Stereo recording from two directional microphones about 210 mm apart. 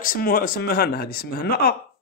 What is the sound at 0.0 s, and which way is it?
A man's voice, 45° left (ahead or behind).